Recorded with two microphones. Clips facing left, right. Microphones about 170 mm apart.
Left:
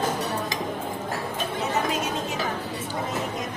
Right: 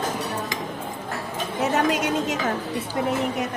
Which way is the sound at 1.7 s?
85° right.